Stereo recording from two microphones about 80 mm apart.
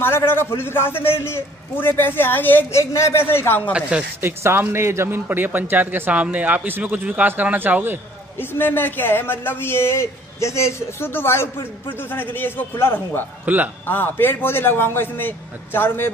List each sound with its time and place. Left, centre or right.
0.0 s speech: left
2.8 s a man's voice: left
4.2 s a man's voice: right
8.4 s speech: left